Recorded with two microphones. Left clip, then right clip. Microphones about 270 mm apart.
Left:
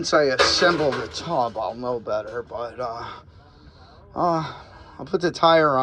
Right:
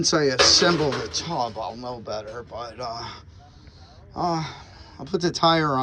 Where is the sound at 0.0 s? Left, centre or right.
Centre.